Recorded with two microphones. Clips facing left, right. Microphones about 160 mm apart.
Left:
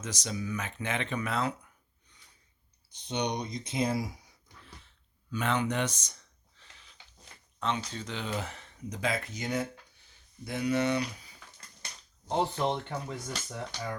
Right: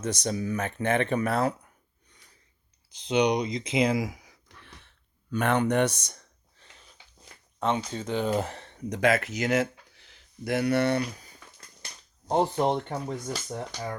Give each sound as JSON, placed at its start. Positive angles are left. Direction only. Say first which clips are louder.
{"t": 0.0, "sound": "speech", "louder": "right 7 dB", "side_deg": -60}
{"t": 2.9, "sound": "a sound", "louder": "right 9 dB", "side_deg": -90}
{"t": 7.6, "sound": "speech", "louder": "right 5 dB", "side_deg": -50}